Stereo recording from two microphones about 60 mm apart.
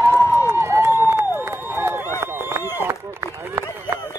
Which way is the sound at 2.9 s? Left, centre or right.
Right.